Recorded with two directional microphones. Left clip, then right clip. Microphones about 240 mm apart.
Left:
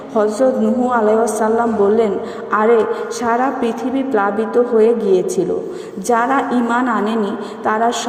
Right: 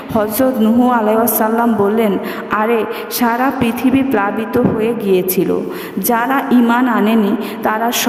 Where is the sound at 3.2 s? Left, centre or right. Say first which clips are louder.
Right 2 dB; right.